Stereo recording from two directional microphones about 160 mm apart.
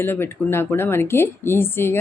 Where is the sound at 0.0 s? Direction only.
15° left (ahead or behind).